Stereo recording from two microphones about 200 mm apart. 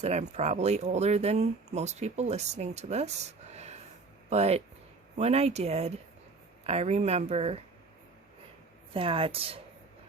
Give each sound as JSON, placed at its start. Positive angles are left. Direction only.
{"t": 0.0, "sound": "speech", "side_deg": -35}
{"t": 8.9, "sound": "a woman's voice", "side_deg": -25}